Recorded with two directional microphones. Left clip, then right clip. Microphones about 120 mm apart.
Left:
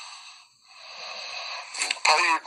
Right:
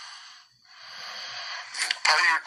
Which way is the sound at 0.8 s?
35° left (ahead or behind).